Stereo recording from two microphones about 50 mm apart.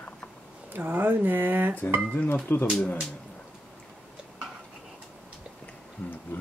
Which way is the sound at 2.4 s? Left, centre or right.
Left.